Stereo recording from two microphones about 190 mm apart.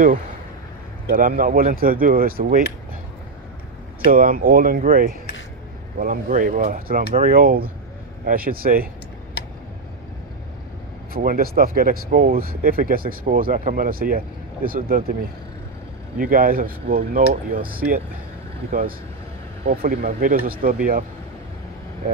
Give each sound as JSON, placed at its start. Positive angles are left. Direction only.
{"t": 1.0, "sound": "speech", "side_deg": -45}
{"t": 4.0, "sound": "speech", "side_deg": -50}
{"t": 11.1, "sound": "speech", "side_deg": -50}
{"t": 16.2, "sound": "speech", "side_deg": -45}
{"t": 18.7, "sound": "speech", "side_deg": -50}